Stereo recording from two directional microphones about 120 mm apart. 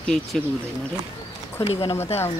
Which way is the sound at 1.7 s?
55° left (ahead or behind).